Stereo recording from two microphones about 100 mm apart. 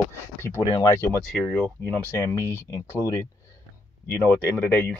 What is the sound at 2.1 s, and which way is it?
Speech, 30° left (ahead or behind).